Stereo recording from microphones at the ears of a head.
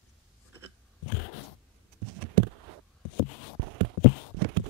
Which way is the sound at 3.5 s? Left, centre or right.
Right.